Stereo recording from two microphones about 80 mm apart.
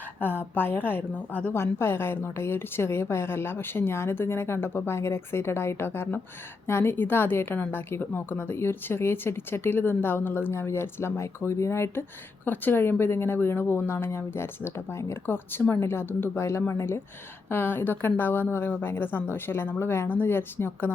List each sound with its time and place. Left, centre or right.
0.2 s a woman's voice: left